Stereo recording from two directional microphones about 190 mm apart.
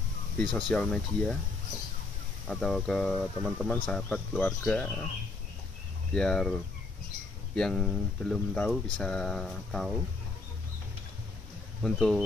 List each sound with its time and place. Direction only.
0.4 s speech: 5° left (ahead or behind)
2.4 s speech: centre (ahead or behind)
6.1 s speech: 5° left (ahead or behind)
11.8 s speech: centre (ahead or behind)